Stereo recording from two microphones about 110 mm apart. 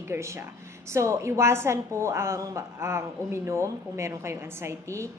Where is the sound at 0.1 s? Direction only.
25° right (ahead or behind).